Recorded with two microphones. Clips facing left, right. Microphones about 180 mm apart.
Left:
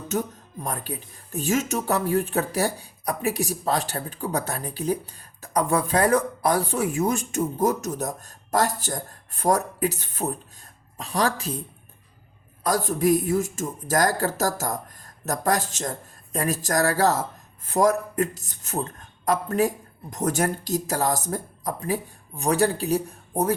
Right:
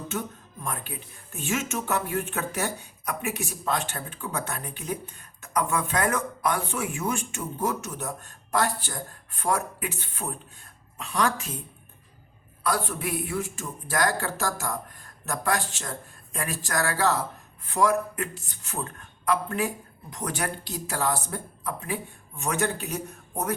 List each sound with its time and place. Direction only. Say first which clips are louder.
0.1 s speech: left 10 dB; 40° left (ahead or behind)
12.6 s speech: left 7 dB; 40° left (ahead or behind)